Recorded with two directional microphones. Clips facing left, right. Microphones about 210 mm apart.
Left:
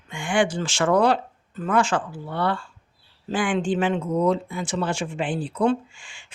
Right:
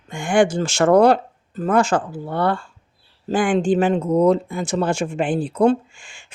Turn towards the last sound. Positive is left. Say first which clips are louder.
# even
turn(degrees=-45)  # may be behind; listen again after turning